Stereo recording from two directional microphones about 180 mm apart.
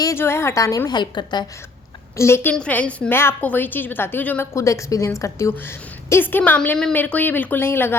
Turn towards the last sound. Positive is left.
turn(degrees=10)  # may be behind; listen again after turning